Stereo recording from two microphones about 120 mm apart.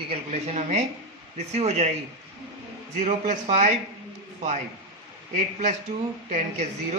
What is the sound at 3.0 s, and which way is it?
Speech, 80° right.